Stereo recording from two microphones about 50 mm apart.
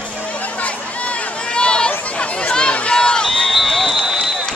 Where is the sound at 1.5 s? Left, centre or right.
Centre.